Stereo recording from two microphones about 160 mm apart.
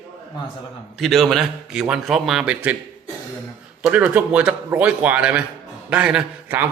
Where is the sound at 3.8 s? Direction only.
10° right (ahead or behind).